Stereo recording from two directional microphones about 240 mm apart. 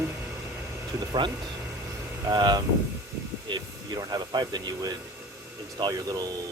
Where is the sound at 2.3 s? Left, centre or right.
Centre.